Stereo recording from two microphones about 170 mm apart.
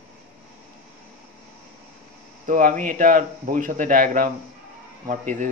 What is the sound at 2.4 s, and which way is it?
Speech, 50° right (ahead or behind).